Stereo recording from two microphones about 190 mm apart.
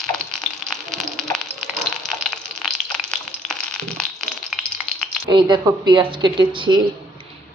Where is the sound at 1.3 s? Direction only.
5° left (ahead or behind).